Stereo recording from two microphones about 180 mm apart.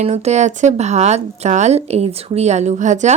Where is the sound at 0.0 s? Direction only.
35° right (ahead or behind).